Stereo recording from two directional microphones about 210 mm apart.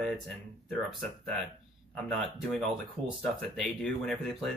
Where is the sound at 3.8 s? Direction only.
Centre (ahead or behind).